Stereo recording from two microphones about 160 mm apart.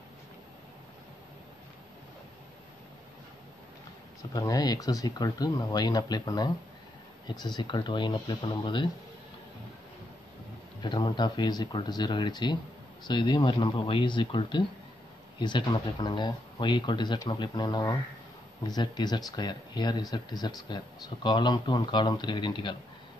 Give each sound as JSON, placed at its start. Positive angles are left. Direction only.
{"t": 4.2, "sound": "speech", "side_deg": 20}
{"t": 10.8, "sound": "speech", "side_deg": 30}